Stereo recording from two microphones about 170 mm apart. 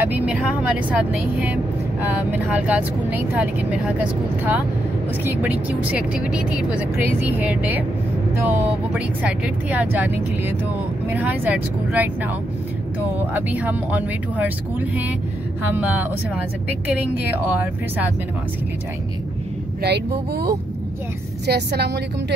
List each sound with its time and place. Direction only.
0.0 s speech: 10° right (ahead or behind)
13.3 s speech: 10° right (ahead or behind)
19.8 s a woman's voice: 70° right (ahead or behind)